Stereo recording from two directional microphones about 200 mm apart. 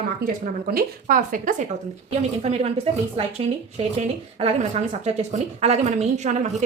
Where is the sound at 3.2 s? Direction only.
30° right (ahead or behind).